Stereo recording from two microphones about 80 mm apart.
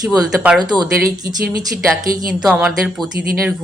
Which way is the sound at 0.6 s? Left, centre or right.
Right.